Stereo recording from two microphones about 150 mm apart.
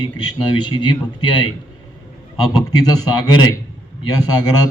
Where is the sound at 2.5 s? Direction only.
25° left (ahead or behind).